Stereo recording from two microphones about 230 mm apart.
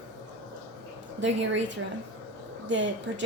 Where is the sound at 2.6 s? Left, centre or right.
Right.